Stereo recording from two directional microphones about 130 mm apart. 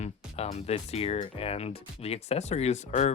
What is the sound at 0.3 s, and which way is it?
Speech, 50° left (ahead or behind).